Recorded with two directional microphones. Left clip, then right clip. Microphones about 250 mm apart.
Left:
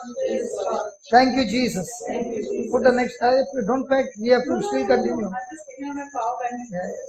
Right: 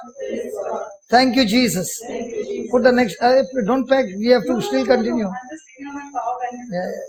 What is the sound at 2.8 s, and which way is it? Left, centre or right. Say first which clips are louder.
A man's voice: right 3 dB; right.